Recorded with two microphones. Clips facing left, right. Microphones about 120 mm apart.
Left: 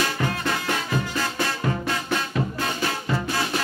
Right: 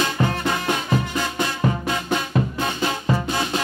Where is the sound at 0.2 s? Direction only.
30° right (ahead or behind).